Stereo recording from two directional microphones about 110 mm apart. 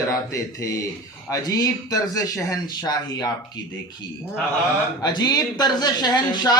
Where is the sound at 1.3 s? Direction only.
35° left (ahead or behind).